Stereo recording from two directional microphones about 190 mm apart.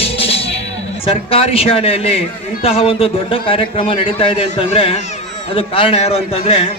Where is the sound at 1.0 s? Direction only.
30° left (ahead or behind).